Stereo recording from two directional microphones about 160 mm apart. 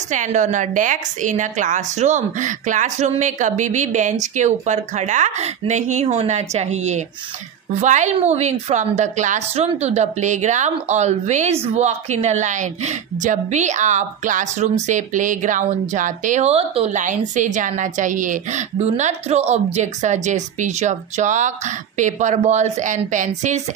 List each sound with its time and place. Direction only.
0.1 s a woman's voice: 50° right (ahead or behind)